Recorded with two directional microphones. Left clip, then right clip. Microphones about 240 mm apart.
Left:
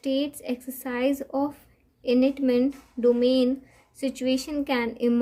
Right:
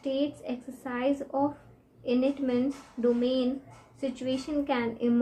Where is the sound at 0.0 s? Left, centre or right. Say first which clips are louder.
Left 3 dB; left.